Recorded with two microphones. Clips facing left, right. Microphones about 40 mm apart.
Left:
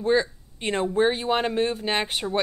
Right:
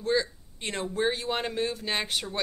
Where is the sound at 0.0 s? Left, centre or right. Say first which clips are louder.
Left 5 dB; left.